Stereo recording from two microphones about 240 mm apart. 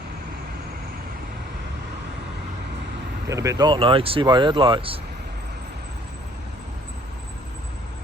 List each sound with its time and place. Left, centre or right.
3.2 s speech: centre